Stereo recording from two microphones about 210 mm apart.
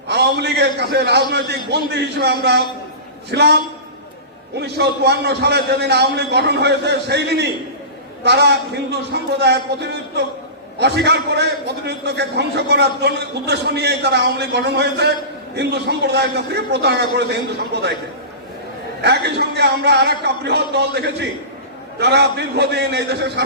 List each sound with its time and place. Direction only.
0.1 s a man's voice: 50° right (ahead or behind)
19.0 s a man's voice: 50° right (ahead or behind)